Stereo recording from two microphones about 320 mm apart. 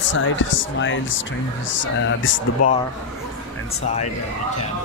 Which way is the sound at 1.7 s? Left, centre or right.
Left.